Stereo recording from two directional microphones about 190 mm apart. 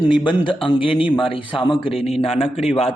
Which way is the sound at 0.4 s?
25° left (ahead or behind).